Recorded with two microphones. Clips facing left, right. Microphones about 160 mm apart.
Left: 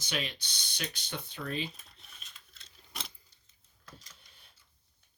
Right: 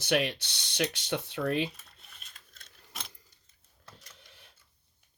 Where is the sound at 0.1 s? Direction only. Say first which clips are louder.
Right 9 dB; 70° right (ahead or behind).